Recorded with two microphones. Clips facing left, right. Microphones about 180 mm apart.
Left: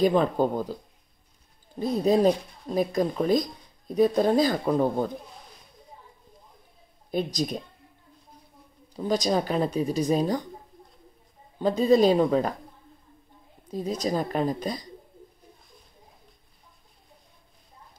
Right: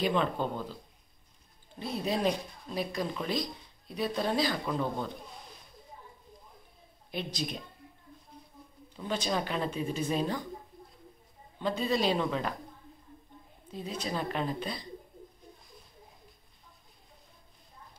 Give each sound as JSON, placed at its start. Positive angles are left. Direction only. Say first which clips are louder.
{"t": 0.0, "sound": "speech", "louder": "left 8 dB", "side_deg": 40}
{"t": 1.8, "sound": "speech", "louder": "left 10 dB", "side_deg": 40}
{"t": 7.1, "sound": "speech", "louder": "left 8 dB", "side_deg": 45}
{"t": 8.9, "sound": "speech", "louder": "left 8 dB", "side_deg": 40}
{"t": 11.5, "sound": "speech", "louder": "left 10 dB", "side_deg": 40}
{"t": 13.7, "sound": "speech", "louder": "left 9 dB", "side_deg": 40}